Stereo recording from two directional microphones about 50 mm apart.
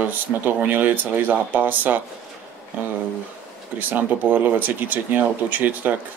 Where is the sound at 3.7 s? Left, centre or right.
Right.